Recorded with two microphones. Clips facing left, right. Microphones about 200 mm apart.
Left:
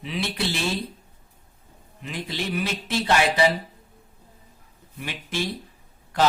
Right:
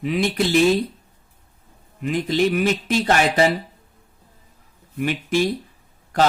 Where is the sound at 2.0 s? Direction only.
50° right (ahead or behind).